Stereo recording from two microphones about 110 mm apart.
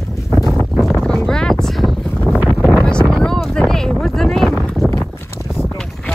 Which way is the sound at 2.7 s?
10° left (ahead or behind).